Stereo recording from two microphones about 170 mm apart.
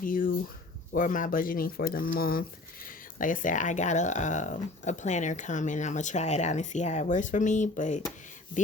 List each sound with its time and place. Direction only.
0.0 s speech: 55° left (ahead or behind)